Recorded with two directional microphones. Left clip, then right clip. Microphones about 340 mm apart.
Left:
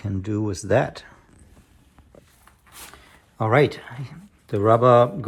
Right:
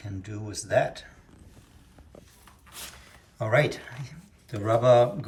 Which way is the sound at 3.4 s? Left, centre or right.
Centre.